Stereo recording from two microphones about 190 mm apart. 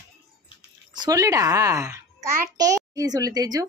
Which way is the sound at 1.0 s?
15° right (ahead or behind).